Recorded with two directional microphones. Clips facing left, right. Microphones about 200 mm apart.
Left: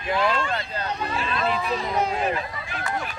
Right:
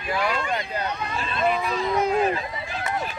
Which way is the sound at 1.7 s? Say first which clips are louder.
Right 1 dB; 30° left (ahead or behind).